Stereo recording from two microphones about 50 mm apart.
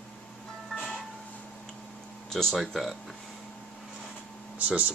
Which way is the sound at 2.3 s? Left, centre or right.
Centre.